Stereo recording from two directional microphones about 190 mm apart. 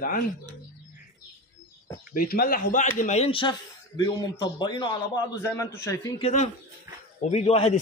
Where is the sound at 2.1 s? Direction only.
50° left (ahead or behind).